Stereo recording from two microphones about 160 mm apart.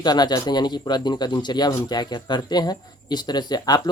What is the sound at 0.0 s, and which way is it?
Speech, 25° left (ahead or behind).